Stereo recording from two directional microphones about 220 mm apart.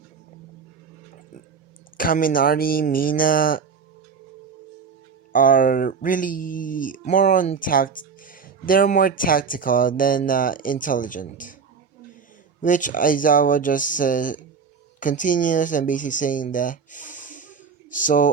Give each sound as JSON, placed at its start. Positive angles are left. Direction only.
{"t": 2.0, "sound": "speech", "side_deg": 40}
{"t": 5.3, "sound": "speech", "side_deg": 40}
{"t": 12.6, "sound": "speech", "side_deg": 35}